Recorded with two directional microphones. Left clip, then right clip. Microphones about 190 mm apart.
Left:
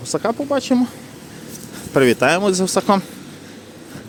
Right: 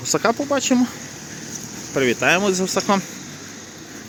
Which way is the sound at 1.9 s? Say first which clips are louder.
Left 5 dB; 35° left (ahead or behind).